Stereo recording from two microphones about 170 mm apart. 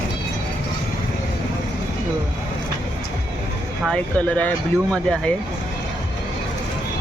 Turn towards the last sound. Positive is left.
turn(degrees=5)  # may be behind; listen again after turning